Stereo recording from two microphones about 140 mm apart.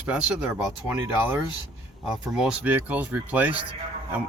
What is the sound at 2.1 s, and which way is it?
Speech, 5° right (ahead or behind).